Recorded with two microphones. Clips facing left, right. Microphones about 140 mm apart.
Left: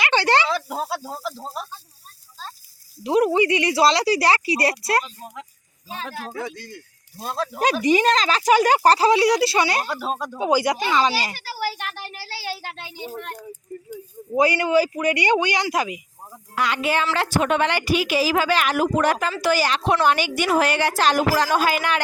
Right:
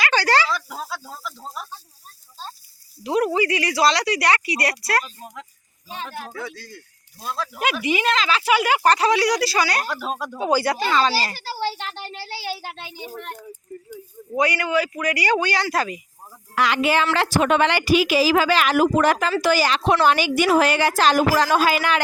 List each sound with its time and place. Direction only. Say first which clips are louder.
0.0 s snake: left 1 dB; 25° left (ahead or behind)
1.1 s speech: left 4 dB; 25° left (ahead or behind)
3.0 s speech: left 2 dB; 25° left (ahead or behind)
5.2 s speech: left 1 dB; 5° left (ahead or behind)
6.4 s speech: left 2 dB; 20° left (ahead or behind)
7.2 s speech: left 3 dB; 35° left (ahead or behind)
9.9 s speech: left 1 dB; centre (ahead or behind)
10.3 s speech: even; 15° left (ahead or behind)
11.3 s a child's voice: right 1 dB; 30° right (ahead or behind)
12.9 s speech: left 2 dB; 20° left (ahead or behind)
14.3 s speech: left 3 dB; 30° left (ahead or behind)
16.6 s a woman's voice: right 3 dB; 90° right